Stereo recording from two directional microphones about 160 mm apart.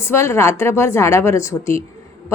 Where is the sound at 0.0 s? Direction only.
15° left (ahead or behind).